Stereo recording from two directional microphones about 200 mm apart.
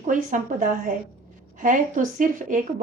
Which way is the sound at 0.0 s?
40° right (ahead or behind).